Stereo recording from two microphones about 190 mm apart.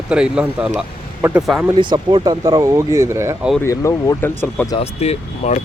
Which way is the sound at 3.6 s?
15° left (ahead or behind).